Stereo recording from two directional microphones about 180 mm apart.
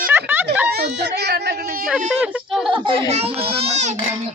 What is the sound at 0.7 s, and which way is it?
Speech, 65° right (ahead or behind).